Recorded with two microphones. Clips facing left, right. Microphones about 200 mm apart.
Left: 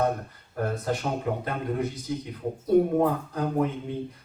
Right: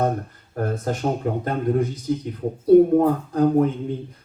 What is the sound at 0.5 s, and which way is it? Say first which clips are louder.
Speech: right 3 dB; 45° right (ahead or behind).